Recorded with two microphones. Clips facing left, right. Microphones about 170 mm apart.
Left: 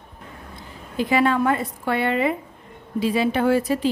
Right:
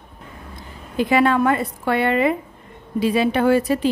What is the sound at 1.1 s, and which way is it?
A woman's voice, 65° right (ahead or behind).